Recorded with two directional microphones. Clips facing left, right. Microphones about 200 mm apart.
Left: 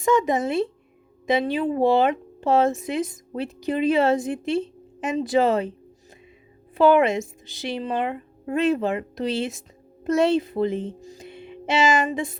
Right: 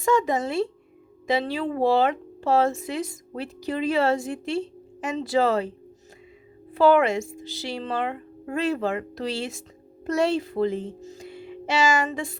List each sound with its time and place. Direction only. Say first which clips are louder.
0.0 s speech: left 2 dB; 20° left (ahead or behind)
6.7 s speech: left 1 dB; 20° left (ahead or behind)